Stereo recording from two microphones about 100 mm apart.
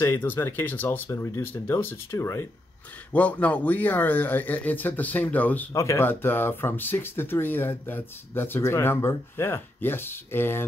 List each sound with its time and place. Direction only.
0.0 s speech: 25° left (ahead or behind)
3.1 s speech: 15° left (ahead or behind)
5.7 s speech: 30° left (ahead or behind)